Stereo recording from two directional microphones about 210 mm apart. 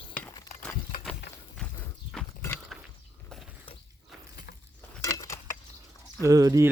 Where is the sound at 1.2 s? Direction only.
55° left (ahead or behind).